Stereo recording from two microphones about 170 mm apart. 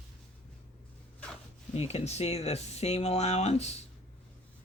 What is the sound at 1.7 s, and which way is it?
Speech, 35° left (ahead or behind).